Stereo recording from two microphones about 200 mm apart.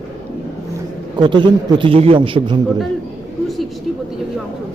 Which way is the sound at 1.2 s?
25° right (ahead or behind).